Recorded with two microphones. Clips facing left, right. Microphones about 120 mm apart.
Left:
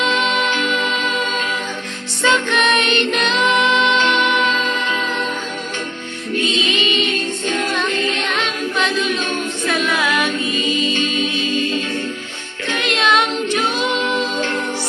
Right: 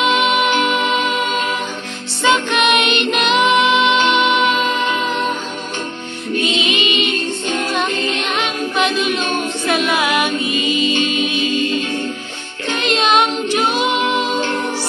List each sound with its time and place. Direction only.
0.0 s music: 15° right (ahead or behind)
6.4 s music: 15° right (ahead or behind)
12.6 s a capella: 25° right (ahead or behind)